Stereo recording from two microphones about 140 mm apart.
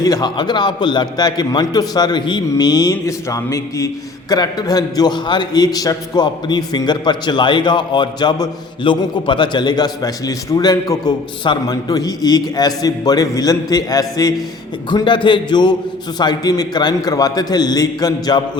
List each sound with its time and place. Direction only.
0.0 s a man's voice: 25° left (ahead or behind)